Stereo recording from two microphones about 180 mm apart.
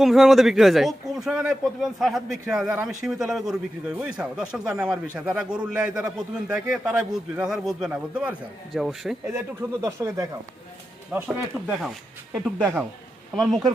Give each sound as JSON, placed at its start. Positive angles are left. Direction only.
{"t": 0.0, "sound": "a man's voice", "side_deg": 0}
{"t": 9.3, "sound": "speech", "side_deg": -15}
{"t": 11.1, "sound": "a man's voice", "side_deg": -5}